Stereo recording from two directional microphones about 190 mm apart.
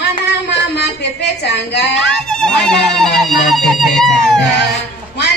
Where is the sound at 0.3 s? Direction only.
65° left (ahead or behind).